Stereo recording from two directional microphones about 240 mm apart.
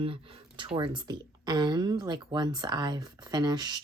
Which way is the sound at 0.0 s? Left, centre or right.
Right.